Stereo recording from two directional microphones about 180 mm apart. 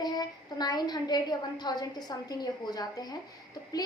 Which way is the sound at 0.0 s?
20° left (ahead or behind).